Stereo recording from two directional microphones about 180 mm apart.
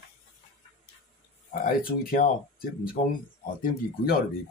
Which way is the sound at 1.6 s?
50° left (ahead or behind).